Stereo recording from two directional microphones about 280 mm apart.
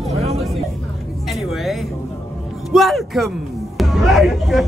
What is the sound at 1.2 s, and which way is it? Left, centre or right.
Music, centre.